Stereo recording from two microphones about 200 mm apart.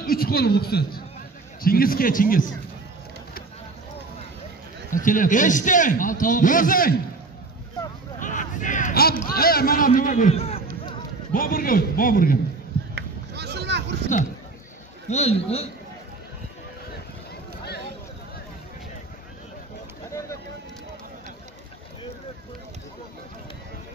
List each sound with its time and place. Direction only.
0.0 s a man's voice: 50° left (ahead or behind)
4.9 s a man's voice: 40° left (ahead or behind)
8.2 s a man's voice: 40° left (ahead or behind)
10.3 s speech: 30° left (ahead or behind)
11.3 s a man's voice: 45° left (ahead or behind)
12.9 s a sound: 55° right (ahead or behind)
15.0 s a man's voice: 30° left (ahead or behind)
20.1 s a sound: 15° left (ahead or behind)